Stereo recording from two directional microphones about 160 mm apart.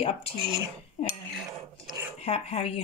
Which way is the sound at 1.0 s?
45° left (ahead or behind).